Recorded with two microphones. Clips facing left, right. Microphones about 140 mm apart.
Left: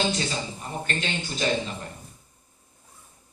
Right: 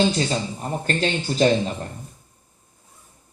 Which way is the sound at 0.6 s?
40° right (ahead or behind).